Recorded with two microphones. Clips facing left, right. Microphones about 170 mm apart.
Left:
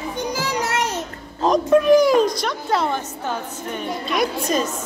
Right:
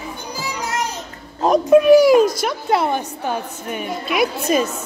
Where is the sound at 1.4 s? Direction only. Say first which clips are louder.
Right 3 dB; 10° right (ahead or behind).